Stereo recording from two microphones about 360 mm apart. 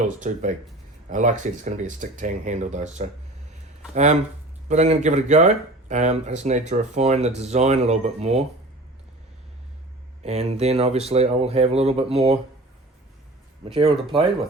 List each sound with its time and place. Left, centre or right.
0.2 s speech: centre
10.2 s speech: centre
13.7 s speech: centre